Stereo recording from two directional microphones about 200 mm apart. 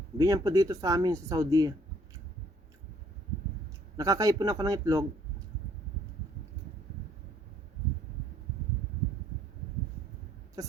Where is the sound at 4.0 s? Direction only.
15° right (ahead or behind).